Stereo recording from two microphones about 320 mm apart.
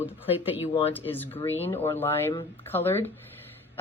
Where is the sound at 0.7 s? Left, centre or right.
Centre.